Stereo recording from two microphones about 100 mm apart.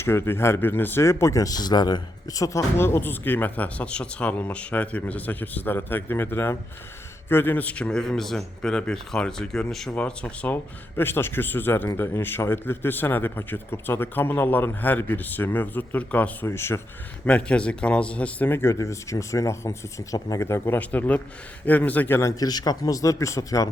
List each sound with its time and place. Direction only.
0.0 s a man's voice: 25° left (ahead or behind)
16.5 s speech: 25° left (ahead or behind)
17.2 s speech: 10° left (ahead or behind); by 20.7 s 25° left (ahead or behind)
20.7 s a man's voice: 15° left (ahead or behind)
22.2 s speech: 35° left (ahead or behind)